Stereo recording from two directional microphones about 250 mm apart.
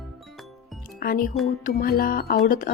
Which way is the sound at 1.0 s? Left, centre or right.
Left.